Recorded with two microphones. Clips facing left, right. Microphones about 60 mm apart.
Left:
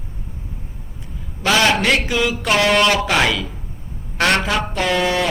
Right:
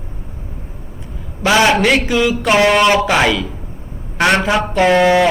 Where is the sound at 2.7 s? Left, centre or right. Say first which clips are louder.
Right 4 dB; centre.